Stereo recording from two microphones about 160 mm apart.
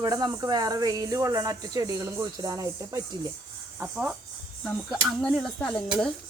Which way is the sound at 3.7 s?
5° right (ahead or behind).